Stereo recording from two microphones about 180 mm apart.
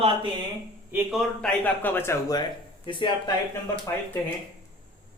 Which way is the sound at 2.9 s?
30° left (ahead or behind).